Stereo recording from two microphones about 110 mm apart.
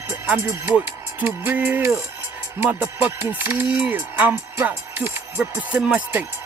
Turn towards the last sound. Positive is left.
turn(degrees=-15)  # may be behind; listen again after turning